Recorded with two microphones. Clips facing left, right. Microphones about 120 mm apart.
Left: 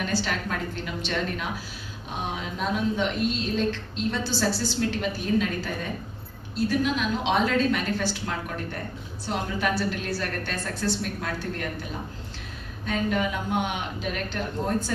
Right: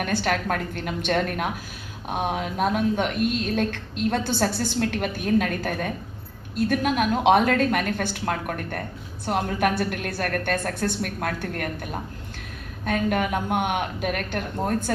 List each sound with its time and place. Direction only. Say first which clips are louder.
0.0 s a woman's voice: right 4 dB; 55° right (ahead or behind)